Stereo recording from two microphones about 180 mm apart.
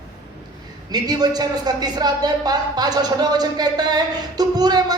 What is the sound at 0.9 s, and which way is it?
Speech, 20° right (ahead or behind).